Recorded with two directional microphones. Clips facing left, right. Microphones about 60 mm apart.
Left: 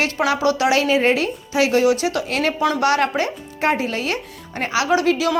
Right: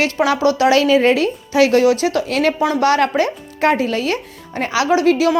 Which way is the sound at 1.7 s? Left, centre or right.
Right.